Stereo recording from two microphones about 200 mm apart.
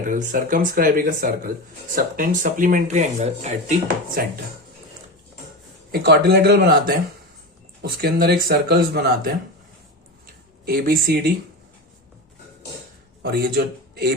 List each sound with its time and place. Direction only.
0.0 s speech: 40° right (ahead or behind)
5.9 s speech: 55° right (ahead or behind)
10.7 s speech: 50° right (ahead or behind)
13.2 s a man's voice: 55° right (ahead or behind)